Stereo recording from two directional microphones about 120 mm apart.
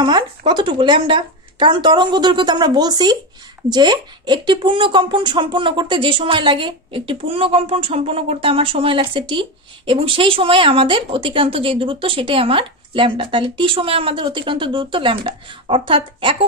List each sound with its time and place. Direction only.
0.0 s a woman's voice: 40° right (ahead or behind)